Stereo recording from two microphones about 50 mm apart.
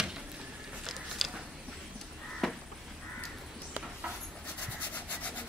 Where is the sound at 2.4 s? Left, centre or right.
Centre.